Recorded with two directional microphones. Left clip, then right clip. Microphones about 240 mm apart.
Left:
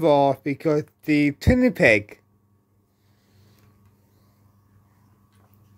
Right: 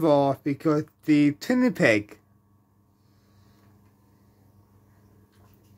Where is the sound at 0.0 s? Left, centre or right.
Centre.